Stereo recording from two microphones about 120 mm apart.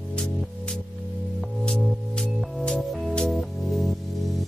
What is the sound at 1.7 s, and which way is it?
Music, 5° left (ahead or behind).